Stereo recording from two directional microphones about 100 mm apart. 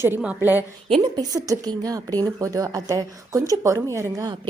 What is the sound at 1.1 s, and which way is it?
Speech, 40° right (ahead or behind).